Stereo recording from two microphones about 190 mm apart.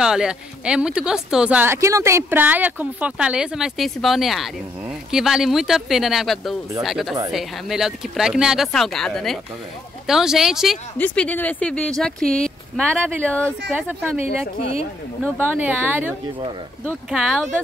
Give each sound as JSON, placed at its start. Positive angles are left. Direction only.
{"t": 0.0, "sound": "speech", "side_deg": -5}
{"t": 13.7, "sound": "speech", "side_deg": -10}
{"t": 14.6, "sound": "speech", "side_deg": 30}
{"t": 15.3, "sound": "speech", "side_deg": -10}
{"t": 17.1, "sound": "speech", "side_deg": 0}